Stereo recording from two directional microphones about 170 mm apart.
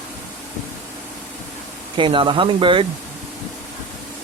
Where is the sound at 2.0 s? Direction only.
30° right (ahead or behind).